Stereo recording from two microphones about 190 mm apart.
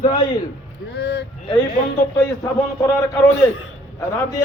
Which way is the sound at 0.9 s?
65° left (ahead or behind).